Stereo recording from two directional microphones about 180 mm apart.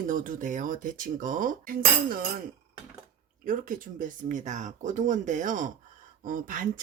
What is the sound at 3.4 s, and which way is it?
A woman's voice, 50° right (ahead or behind).